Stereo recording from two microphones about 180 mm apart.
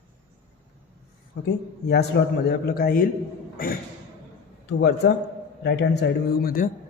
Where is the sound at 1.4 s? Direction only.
75° left (ahead or behind); by 3.7 s 55° left (ahead or behind).